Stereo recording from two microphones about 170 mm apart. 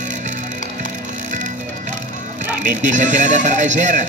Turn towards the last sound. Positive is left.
turn(degrees=-45)  # may be behind; listen again after turning